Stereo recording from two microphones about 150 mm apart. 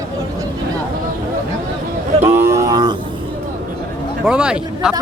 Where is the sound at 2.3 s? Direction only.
20° right (ahead or behind).